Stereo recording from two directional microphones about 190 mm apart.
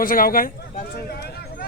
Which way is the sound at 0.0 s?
50° left (ahead or behind).